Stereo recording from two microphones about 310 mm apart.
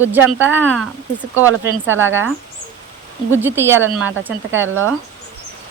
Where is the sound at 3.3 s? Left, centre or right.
Centre.